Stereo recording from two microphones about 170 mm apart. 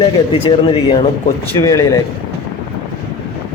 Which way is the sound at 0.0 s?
30° left (ahead or behind).